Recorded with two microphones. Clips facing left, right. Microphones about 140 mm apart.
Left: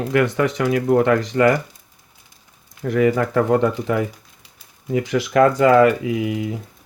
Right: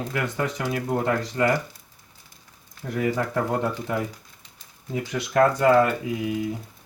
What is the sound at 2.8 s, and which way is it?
Speech, 90° left.